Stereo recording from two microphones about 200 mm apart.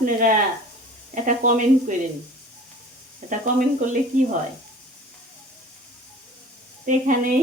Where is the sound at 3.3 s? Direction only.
40° right (ahead or behind).